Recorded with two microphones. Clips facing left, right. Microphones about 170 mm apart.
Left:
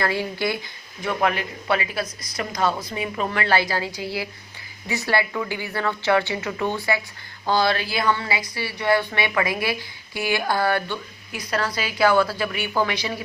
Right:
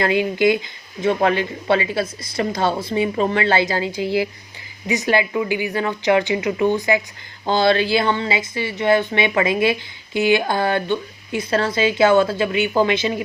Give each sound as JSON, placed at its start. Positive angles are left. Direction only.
{"t": 0.0, "sound": "a woman's voice", "side_deg": -20}